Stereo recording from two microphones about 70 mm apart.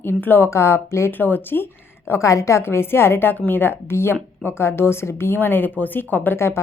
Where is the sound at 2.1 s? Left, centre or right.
Left.